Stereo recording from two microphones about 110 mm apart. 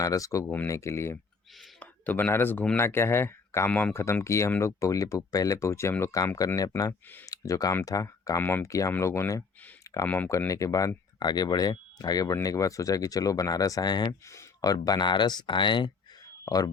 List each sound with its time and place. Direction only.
0.0 s speech: 30° left (ahead or behind)
0.4 s speech: 15° left (ahead or behind)
1.8 s speech: 15° left (ahead or behind)
3.7 s speech: 10° left (ahead or behind)
3.9 s speech: 25° left (ahead or behind)
8.4 s speech: 20° left (ahead or behind)
8.6 s speech: 30° left (ahead or behind)
9.9 s a sound: 30° left (ahead or behind)
10.2 s speech: 30° left (ahead or behind); by 15.9 s 45° left (ahead or behind)